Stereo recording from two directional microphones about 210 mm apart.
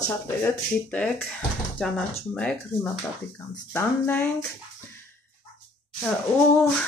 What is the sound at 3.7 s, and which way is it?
Speech, 10° left (ahead or behind).